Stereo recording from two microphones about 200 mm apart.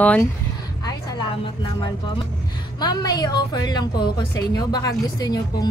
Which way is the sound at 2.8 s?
20° left (ahead or behind).